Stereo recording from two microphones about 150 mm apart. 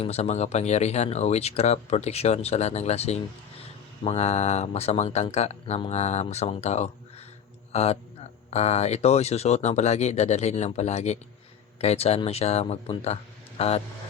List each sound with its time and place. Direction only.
0.0 s speech: 45° left (ahead or behind)